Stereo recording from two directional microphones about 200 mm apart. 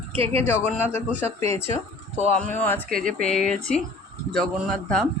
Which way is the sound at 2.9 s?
40° right (ahead or behind).